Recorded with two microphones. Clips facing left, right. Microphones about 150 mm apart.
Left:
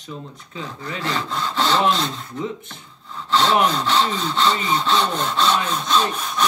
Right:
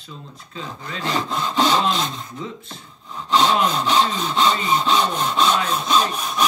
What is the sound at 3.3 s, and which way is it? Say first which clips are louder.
Sawing: even; 15° right (ahead or behind).